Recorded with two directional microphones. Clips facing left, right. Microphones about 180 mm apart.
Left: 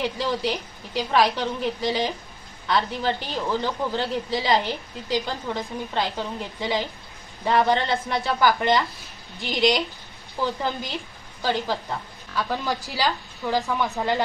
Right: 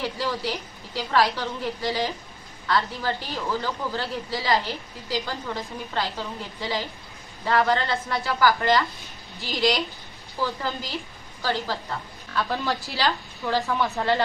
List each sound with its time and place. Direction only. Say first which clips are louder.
0.0 s a woman's voice: left 3 dB; 20° left (ahead or behind)